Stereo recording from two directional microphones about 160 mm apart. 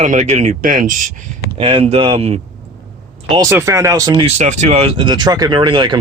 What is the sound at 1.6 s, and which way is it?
Speech, 35° right (ahead or behind).